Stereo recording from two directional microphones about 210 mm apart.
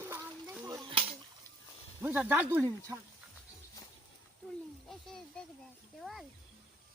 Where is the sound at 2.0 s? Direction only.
10° right (ahead or behind).